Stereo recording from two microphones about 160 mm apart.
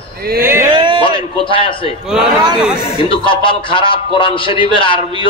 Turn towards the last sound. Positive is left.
turn(degrees=30)  # may be behind; listen again after turning